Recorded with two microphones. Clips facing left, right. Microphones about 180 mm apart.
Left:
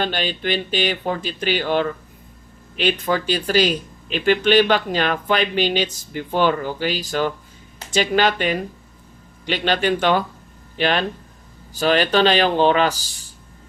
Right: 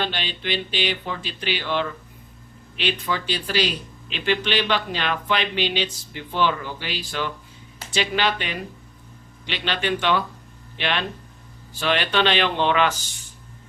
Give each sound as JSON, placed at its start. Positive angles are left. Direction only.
{"t": 0.0, "sound": "speech", "side_deg": 45}